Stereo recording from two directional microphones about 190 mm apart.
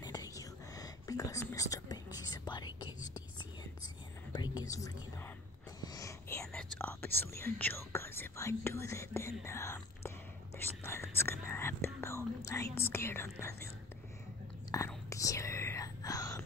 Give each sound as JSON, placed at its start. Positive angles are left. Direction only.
{"t": 0.0, "sound": "whispering", "side_deg": 20}
{"t": 14.7, "sound": "whispering", "side_deg": 15}